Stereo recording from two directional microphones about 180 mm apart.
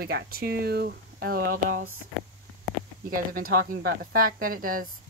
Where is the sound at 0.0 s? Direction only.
60° right (ahead or behind).